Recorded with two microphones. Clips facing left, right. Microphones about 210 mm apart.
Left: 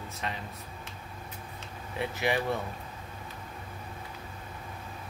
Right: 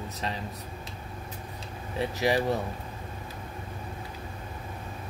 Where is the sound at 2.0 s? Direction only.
35° right (ahead or behind).